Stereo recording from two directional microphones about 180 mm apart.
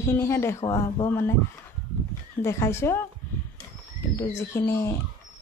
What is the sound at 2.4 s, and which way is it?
Speech, 15° left (ahead or behind).